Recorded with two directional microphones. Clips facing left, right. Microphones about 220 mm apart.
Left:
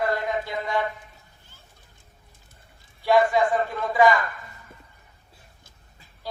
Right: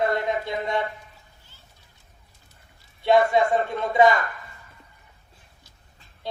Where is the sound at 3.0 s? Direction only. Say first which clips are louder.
Right 1 dB; 25° right (ahead or behind).